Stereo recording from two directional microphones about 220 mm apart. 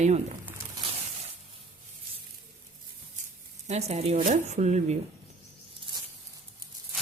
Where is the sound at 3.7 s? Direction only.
30° right (ahead or behind).